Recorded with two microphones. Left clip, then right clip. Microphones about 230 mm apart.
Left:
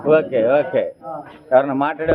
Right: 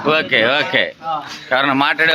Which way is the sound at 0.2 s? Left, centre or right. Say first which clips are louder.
Right 1 dB; right.